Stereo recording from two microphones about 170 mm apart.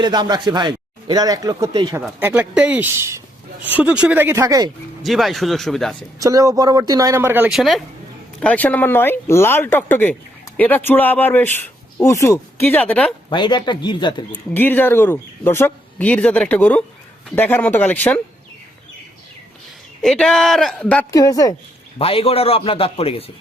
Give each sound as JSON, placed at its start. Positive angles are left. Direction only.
{"t": 0.0, "sound": "speech", "side_deg": -25}
{"t": 2.0, "sound": "speech", "side_deg": -5}
{"t": 5.0, "sound": "speech", "side_deg": 0}
{"t": 6.1, "sound": "speech", "side_deg": -20}
{"t": 13.3, "sound": "speech", "side_deg": 25}
{"t": 14.5, "sound": "speech", "side_deg": 10}
{"t": 20.0, "sound": "speech", "side_deg": 0}
{"t": 21.9, "sound": "a man's voice", "side_deg": 35}